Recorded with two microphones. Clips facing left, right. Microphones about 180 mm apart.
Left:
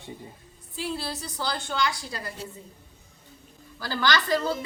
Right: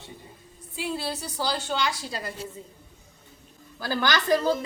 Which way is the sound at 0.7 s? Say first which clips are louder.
Right 1 dB; 15° right (ahead or behind).